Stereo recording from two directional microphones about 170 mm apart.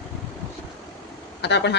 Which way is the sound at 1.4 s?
90° left.